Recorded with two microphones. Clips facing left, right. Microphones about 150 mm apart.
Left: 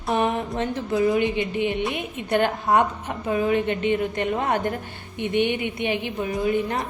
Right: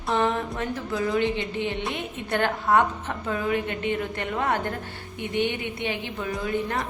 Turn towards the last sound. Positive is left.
turn(degrees=20)  # may be behind; listen again after turning